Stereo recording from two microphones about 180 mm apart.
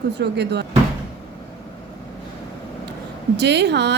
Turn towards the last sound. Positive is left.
turn(degrees=-70)  # may be behind; listen again after turning